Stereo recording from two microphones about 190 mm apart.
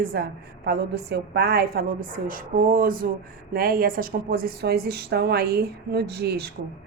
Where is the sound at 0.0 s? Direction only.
50° right (ahead or behind).